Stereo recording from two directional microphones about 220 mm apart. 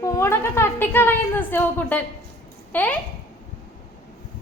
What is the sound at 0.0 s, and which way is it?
A woman's voice, 15° left (ahead or behind).